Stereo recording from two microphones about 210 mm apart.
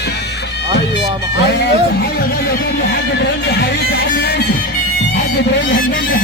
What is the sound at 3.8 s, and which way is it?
Music, 50° left (ahead or behind).